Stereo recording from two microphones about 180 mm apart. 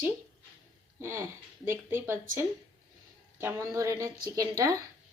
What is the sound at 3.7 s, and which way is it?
A woman's voice, 15° right (ahead or behind).